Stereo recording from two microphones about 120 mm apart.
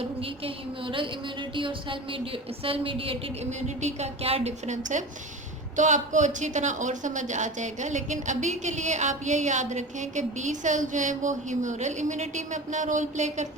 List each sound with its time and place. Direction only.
0.0 s a woman's voice: 50° right (ahead or behind)
3.8 s a woman's voice: 70° right (ahead or behind)